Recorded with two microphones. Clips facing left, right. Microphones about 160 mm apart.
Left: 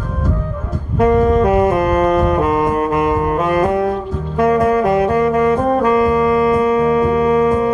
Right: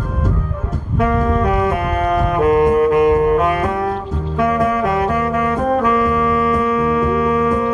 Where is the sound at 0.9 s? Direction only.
35° left (ahead or behind).